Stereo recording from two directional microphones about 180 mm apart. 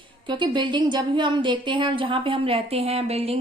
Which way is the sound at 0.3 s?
25° right (ahead or behind).